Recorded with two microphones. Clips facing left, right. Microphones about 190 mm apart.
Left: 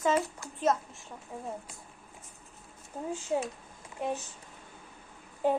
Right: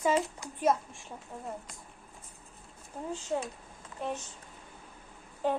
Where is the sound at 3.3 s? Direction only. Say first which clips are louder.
Left 3 dB; 15° left (ahead or behind).